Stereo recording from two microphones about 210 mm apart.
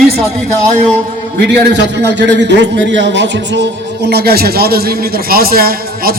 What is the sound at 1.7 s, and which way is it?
A man's voice, 55° right (ahead or behind).